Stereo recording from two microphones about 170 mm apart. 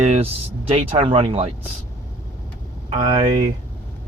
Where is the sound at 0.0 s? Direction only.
35° right (ahead or behind).